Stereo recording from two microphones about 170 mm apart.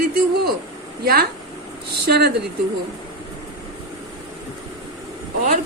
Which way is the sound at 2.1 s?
75° right (ahead or behind).